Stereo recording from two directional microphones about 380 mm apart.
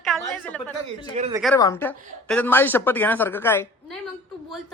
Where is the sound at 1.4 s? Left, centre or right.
Centre.